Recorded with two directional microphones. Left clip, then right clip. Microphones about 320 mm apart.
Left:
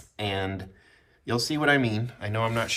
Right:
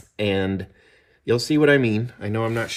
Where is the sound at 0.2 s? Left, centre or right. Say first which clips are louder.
Right 7 dB; centre.